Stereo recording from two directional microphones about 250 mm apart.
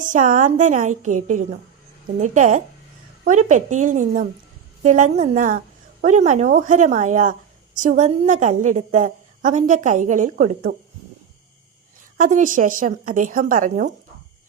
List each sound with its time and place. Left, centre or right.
0.0 s a woman's voice: right
12.1 s a woman's voice: right